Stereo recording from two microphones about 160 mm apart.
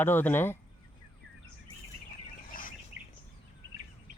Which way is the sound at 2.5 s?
60° left (ahead or behind).